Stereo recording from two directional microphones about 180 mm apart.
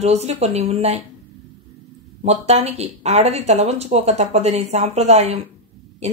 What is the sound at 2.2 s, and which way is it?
A woman's voice, 35° right (ahead or behind).